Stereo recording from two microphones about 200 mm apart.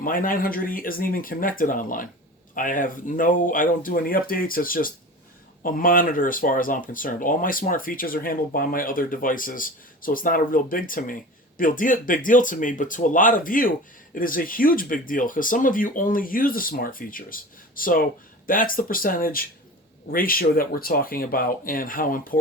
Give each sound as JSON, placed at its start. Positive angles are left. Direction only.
{"t": 0.0, "sound": "speech", "side_deg": 45}